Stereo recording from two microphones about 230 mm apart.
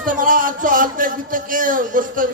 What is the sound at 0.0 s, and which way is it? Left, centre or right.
Speech, right.